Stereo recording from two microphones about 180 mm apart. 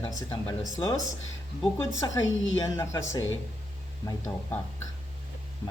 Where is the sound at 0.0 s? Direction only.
15° left (ahead or behind).